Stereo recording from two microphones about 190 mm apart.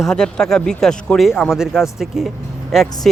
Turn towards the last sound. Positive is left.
turn(degrees=0)  # may be behind; listen again after turning